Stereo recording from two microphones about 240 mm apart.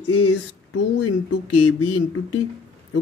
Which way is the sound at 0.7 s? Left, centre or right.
Left.